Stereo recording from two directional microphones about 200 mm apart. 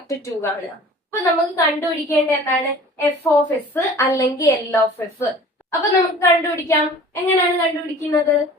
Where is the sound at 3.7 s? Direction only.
15° left (ahead or behind).